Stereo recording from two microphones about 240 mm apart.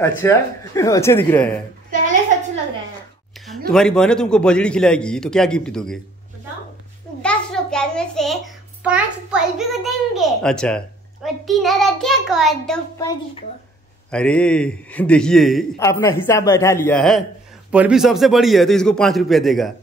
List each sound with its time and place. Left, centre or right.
0.2 s speech: centre
3.3 s a sound: centre
3.7 s a man's voice: centre
7.2 s a sound: centre
8.8 s a child's voice: centre
13.0 s speech: centre
14.1 s a man's voice: centre